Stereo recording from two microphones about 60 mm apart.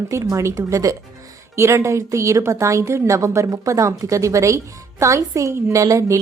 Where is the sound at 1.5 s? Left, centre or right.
Right.